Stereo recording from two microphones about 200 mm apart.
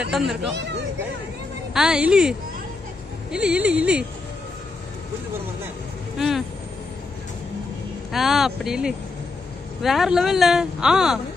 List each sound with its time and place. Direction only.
0.0 s speech: centre (ahead or behind)
0.5 s speech: 60° right (ahead or behind)
1.7 s speech: 5° right (ahead or behind)
6.1 s speech: centre (ahead or behind)
8.1 s speech: centre (ahead or behind)